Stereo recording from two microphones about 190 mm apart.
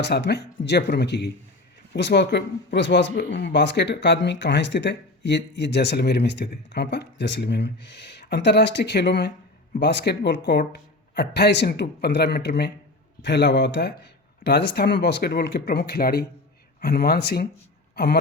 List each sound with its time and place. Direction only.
0.0 s speech: 65° left (ahead or behind)